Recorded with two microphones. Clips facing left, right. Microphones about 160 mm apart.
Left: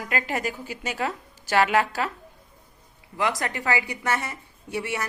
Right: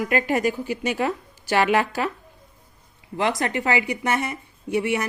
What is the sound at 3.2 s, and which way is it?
Speech, 25° right (ahead or behind).